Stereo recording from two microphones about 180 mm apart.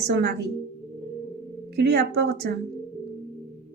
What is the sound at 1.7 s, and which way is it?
Speech, 65° right (ahead or behind).